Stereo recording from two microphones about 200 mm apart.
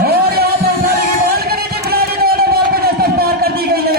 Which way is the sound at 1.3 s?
50° right (ahead or behind).